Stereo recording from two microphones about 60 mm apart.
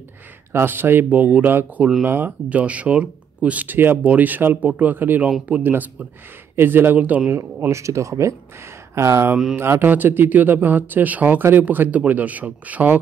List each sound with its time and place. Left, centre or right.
0.5 s a man's voice: right
1.2 s speech: right
2.0 s a man's voice: right
2.5 s speech: right
3.6 s a man's voice: right
6.5 s a man's voice: right
7.7 s a man's voice: right